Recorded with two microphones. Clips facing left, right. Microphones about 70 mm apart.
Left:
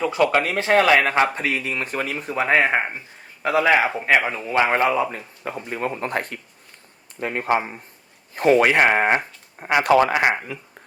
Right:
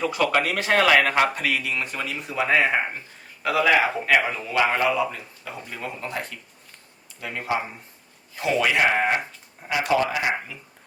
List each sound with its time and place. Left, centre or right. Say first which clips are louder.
0.2 s a man's voice: left 4 dB; left
5.6 s speech: left 7 dB; left
9.6 s speech: left 6 dB; left